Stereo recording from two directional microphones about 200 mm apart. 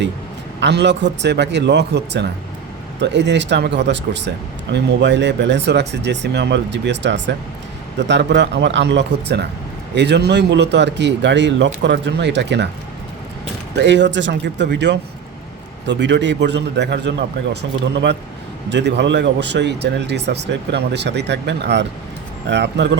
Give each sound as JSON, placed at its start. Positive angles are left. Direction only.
{"t": 0.6, "sound": "speech", "side_deg": -60}
{"t": 13.7, "sound": "speech", "side_deg": -60}